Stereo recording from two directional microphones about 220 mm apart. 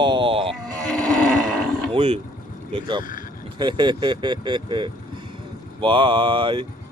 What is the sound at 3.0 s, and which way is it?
Vehicle, 40° left (ahead or behind).